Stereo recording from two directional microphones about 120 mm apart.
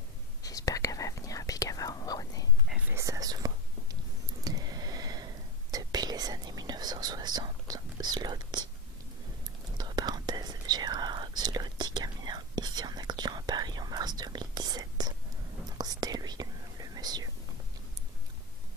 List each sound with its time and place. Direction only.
0.4 s whispering: 30° left (ahead or behind)
2.9 s whispering: 25° right (ahead or behind)
9.8 s whispering: 35° right (ahead or behind)